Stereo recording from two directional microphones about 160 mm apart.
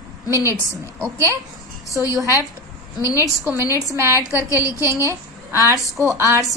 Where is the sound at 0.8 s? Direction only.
15° right (ahead or behind).